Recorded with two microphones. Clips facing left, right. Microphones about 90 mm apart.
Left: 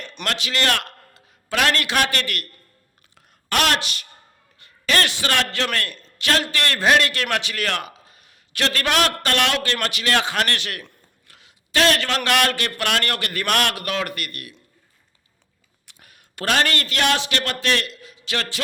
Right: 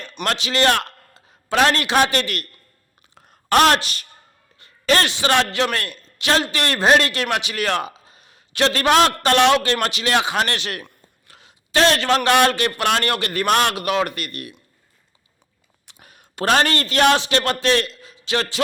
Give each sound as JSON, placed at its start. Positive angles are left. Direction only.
{"t": 0.3, "sound": "a man's voice", "side_deg": -25}
{"t": 3.2, "sound": "a sound", "side_deg": -35}
{"t": 4.5, "sound": "a man's voice", "side_deg": -30}
{"t": 16.0, "sound": "a man's voice", "side_deg": -25}